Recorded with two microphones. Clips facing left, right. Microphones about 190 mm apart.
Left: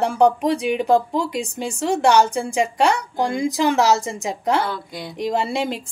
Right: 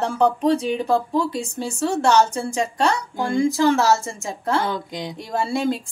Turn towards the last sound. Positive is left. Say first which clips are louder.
# even
turn(degrees=20)  # may be behind; listen again after turning